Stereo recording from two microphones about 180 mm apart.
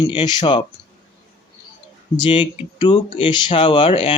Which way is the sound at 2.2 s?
25° left (ahead or behind).